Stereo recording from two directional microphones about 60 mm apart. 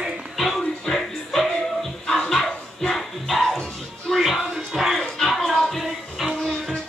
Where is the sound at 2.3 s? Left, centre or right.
Centre.